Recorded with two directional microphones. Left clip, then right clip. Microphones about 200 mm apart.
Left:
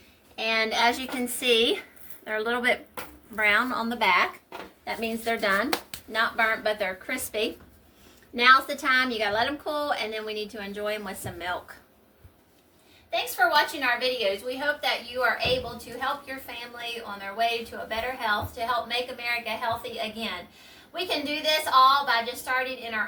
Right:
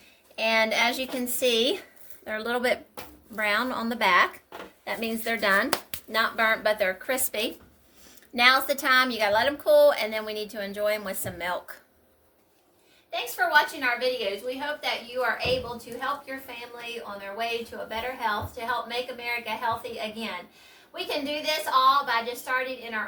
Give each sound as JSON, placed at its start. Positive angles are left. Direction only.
{"t": 0.3, "sound": "a sound", "side_deg": -55}
{"t": 1.4, "sound": "a woman's voice", "side_deg": -60}
{"t": 13.1, "sound": "a woman's voice", "side_deg": 0}